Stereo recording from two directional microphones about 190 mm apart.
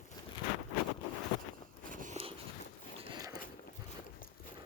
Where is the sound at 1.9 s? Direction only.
45° right (ahead or behind).